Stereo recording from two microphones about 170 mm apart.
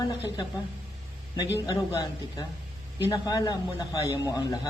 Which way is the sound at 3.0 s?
20° left (ahead or behind).